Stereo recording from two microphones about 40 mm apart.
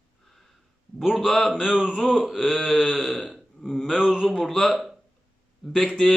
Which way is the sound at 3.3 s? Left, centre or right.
Centre.